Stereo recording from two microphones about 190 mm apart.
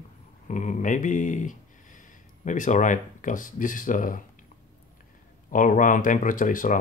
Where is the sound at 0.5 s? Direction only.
40° left (ahead or behind).